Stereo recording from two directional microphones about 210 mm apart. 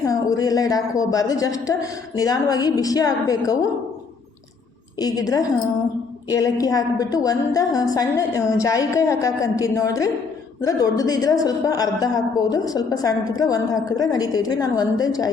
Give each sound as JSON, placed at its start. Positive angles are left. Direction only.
{"t": 0.0, "sound": "a woman's voice", "side_deg": 15}
{"t": 4.9, "sound": "a woman's voice", "side_deg": 15}